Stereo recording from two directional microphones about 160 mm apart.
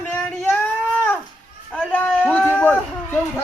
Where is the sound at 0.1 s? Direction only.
10° left (ahead or behind).